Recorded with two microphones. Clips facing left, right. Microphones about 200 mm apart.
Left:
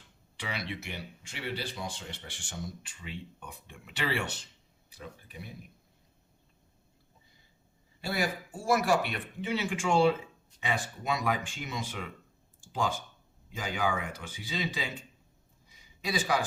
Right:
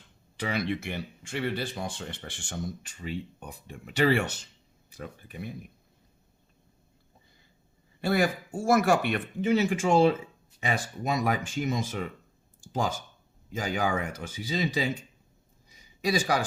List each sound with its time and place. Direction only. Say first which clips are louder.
0.3 s speech: right 8 dB; 45° right (ahead or behind)
8.0 s speech: right 7 dB; 55° right (ahead or behind)
15.7 s a sound: right 6 dB; 45° right (ahead or behind)